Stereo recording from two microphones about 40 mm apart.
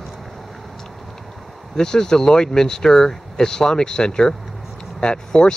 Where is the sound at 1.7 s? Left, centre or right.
Centre.